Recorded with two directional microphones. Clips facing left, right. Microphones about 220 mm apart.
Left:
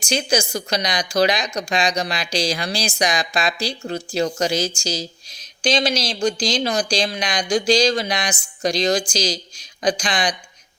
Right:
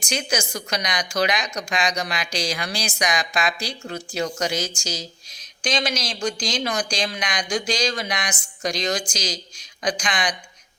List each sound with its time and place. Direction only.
0.0 s speech: 30° left (ahead or behind)